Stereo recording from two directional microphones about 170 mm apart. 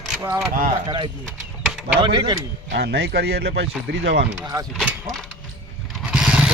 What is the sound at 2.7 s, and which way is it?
Speech, 70° right (ahead or behind).